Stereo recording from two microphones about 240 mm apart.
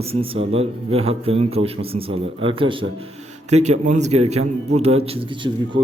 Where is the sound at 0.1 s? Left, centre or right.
Right.